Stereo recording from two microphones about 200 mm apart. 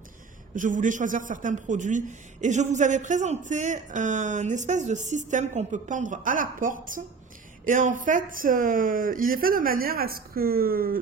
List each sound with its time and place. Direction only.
0.6 s a man's voice: 40° right (ahead or behind)